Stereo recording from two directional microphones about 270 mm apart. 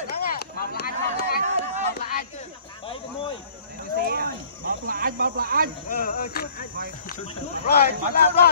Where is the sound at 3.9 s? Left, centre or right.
Right.